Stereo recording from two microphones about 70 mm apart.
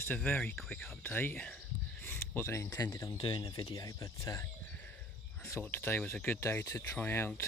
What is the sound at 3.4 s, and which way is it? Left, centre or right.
Speech, left.